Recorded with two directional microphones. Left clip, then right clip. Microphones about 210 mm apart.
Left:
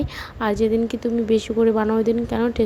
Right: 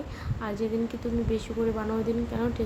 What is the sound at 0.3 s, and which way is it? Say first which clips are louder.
Speech: left 10 dB; 40° left (ahead or behind).